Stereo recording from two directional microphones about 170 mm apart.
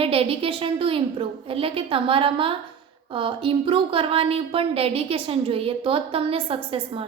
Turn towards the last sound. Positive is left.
turn(degrees=-30)  # may be behind; listen again after turning